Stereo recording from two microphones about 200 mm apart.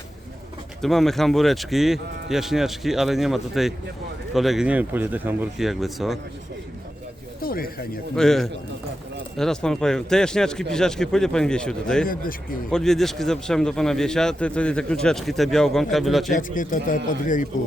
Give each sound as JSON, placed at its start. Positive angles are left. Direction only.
{"t": 0.8, "sound": "a man's voice", "side_deg": 0}
{"t": 7.4, "sound": "a sound", "side_deg": 45}
{"t": 8.1, "sound": "a man's voice", "side_deg": 0}
{"t": 16.4, "sound": "a man's voice", "side_deg": 40}